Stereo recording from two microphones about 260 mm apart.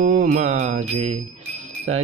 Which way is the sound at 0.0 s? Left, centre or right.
Right.